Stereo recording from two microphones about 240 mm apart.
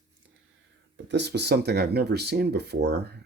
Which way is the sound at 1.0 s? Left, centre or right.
Right.